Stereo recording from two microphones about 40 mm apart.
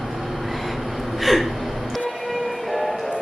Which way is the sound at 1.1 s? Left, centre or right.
Centre.